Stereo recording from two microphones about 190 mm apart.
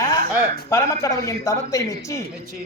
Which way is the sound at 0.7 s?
15° left (ahead or behind).